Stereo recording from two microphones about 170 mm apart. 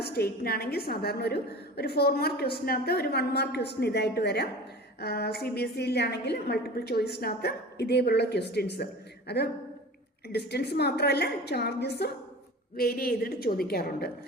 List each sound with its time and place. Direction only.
0.0 s a woman's voice: 70° left (ahead or behind)
12.7 s a woman's voice: 60° left (ahead or behind)